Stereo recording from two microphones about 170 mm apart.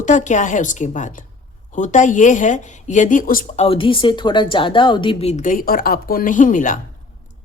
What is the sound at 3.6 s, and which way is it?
A woman's voice, 35° left (ahead or behind).